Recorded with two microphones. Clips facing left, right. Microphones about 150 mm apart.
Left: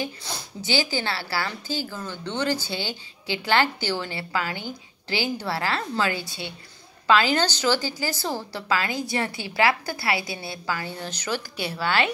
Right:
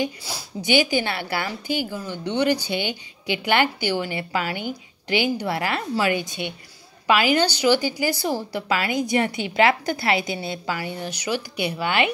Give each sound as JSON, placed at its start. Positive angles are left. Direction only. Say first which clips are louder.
{"t": 0.0, "sound": "a woman's voice", "louder": "right 4 dB", "side_deg": -10}